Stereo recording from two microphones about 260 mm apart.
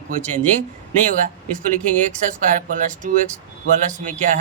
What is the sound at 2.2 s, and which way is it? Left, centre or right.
Speech, right.